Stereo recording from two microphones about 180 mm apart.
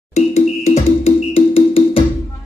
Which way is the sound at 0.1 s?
35° left (ahead or behind).